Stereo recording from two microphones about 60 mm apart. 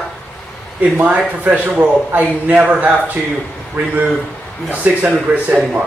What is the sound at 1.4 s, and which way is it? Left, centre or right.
A man's voice, right.